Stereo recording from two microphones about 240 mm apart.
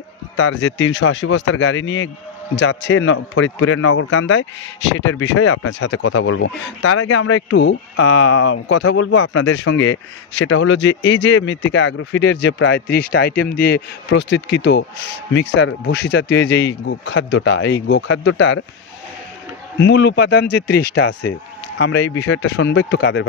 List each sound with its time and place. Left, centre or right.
0.4 s a man's voice: left
19.8 s a man's voice: left